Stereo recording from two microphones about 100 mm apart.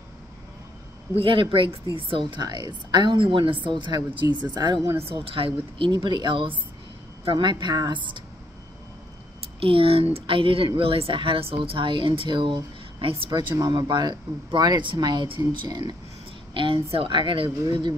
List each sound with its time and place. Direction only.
1.1 s speech: 65° right (ahead or behind)
2.4 s a woman's voice: 40° right (ahead or behind)
5.0 s a woman's voice: 65° right (ahead or behind)
9.6 s speech: 65° right (ahead or behind)
13.6 s a woman's voice: 45° right (ahead or behind)